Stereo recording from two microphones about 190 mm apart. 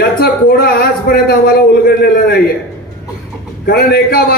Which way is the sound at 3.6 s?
55° left (ahead or behind).